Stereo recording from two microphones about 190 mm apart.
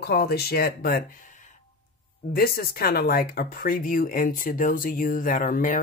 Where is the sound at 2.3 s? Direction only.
50° left (ahead or behind).